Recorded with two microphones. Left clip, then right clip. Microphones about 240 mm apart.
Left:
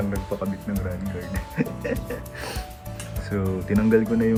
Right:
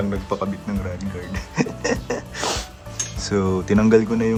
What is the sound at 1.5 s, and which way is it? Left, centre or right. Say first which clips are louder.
Music: right 6 dB; centre.